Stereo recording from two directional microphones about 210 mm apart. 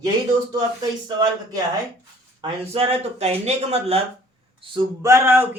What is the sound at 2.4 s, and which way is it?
Speech, 25° right (ahead or behind).